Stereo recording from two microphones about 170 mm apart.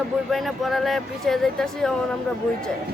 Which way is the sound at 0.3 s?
Centre (ahead or behind).